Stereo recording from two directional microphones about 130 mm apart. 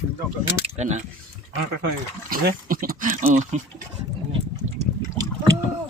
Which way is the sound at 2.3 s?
90° right.